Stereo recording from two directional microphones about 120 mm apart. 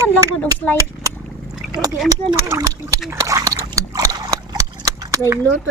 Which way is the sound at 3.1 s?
25° right (ahead or behind).